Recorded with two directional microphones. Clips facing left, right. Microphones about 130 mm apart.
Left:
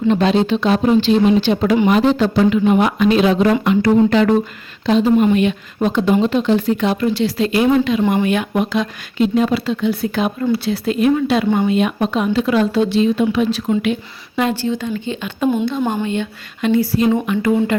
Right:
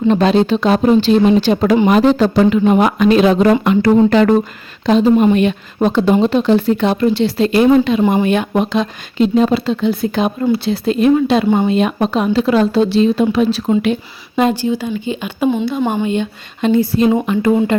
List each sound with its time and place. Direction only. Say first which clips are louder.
0.1 s a woman's voice: right 2 dB; 40° right (ahead or behind); by 11.7 s 20° right (ahead or behind)
11.7 s a woman's voice: right 2 dB; 35° right (ahead or behind)
14.3 s speech: right 4 dB; 20° right (ahead or behind)
15.4 s a woman's voice: right 1 dB; 5° left (ahead or behind)
16.0 s speech: right 3 dB; 20° right (ahead or behind)